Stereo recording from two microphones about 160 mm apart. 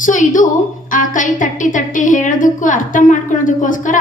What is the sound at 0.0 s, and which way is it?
A woman's voice, 55° left (ahead or behind).